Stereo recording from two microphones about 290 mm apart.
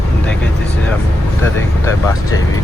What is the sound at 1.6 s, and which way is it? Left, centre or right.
Speech, centre.